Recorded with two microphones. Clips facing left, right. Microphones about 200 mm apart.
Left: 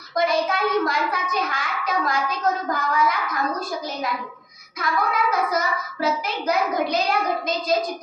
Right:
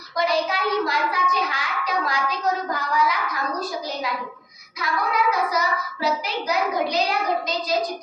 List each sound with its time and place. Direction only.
0.2 s a child's voice: 50° left (ahead or behind)
4.8 s a child's voice: 50° left (ahead or behind)